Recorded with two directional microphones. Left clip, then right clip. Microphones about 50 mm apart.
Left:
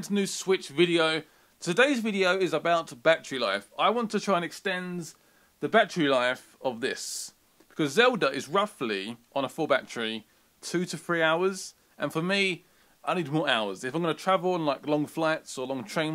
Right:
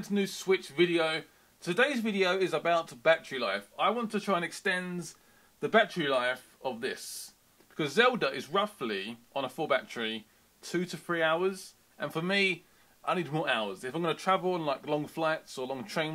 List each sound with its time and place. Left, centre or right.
0.0 s speech: left
4.6 s a man's voice: left
5.9 s speech: left
13.5 s speech: left